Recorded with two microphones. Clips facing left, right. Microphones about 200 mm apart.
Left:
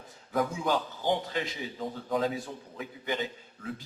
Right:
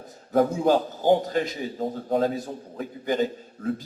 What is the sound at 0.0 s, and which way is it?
A man's voice, 40° right (ahead or behind).